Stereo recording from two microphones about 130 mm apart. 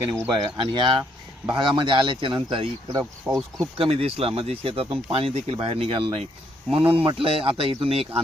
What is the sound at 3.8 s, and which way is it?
Speech, 50° right (ahead or behind).